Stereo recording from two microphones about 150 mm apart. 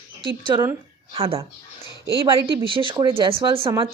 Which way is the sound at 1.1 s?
40° right (ahead or behind).